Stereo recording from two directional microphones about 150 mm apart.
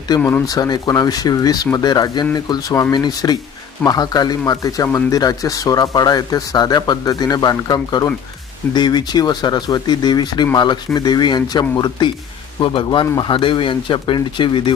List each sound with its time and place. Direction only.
0.2 s speech: 15° left (ahead or behind)
0.4 s speech: 25° left (ahead or behind)